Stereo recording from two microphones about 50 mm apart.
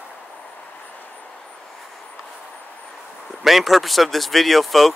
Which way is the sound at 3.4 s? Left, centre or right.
Centre.